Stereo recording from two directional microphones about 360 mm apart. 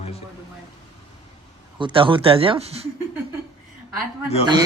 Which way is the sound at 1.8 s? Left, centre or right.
Centre.